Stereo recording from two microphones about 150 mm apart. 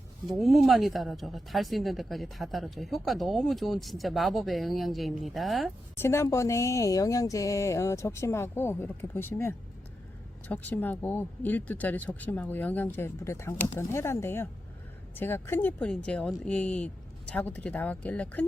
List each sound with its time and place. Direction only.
0.3 s speech: centre (ahead or behind)
6.0 s speech: 15° left (ahead or behind)